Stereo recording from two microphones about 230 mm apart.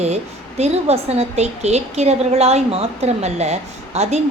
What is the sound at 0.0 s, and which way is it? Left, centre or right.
A woman's voice, right.